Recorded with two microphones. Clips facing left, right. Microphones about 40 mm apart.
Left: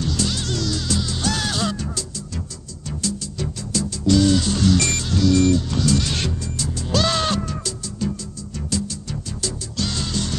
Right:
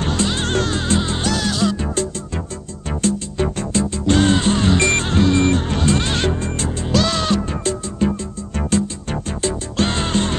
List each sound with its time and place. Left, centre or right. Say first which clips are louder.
0.0 s music: right 4 dB; right